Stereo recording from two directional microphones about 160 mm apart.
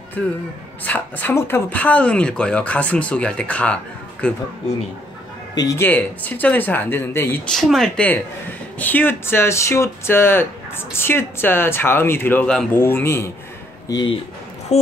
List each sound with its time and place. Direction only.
0.8 s speech: 10° left (ahead or behind)
5.5 s speech: 20° left (ahead or behind)
7.4 s speech: centre (ahead or behind)
13.8 s speech: 25° left (ahead or behind)
14.7 s a sound: 45° left (ahead or behind)